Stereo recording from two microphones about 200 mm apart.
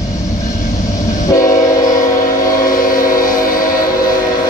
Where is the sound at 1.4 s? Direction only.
40° left (ahead or behind).